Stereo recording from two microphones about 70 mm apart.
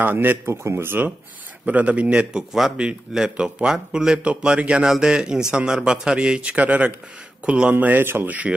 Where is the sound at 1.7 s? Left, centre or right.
Right.